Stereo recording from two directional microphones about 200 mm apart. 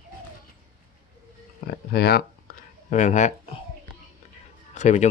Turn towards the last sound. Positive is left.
turn(degrees=35)  # may be behind; listen again after turning